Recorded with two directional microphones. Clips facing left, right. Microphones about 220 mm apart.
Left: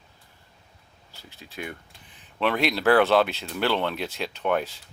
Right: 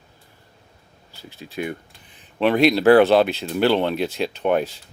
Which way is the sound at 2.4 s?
15° right (ahead or behind).